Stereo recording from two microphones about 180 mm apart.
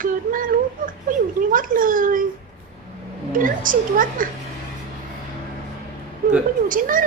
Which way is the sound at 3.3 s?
50° right (ahead or behind).